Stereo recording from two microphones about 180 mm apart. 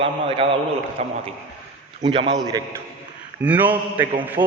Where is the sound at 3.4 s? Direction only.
10° right (ahead or behind).